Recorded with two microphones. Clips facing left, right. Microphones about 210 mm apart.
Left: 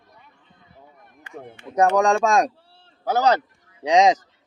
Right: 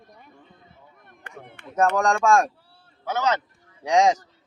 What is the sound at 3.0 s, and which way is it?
Speech, 35° left (ahead or behind).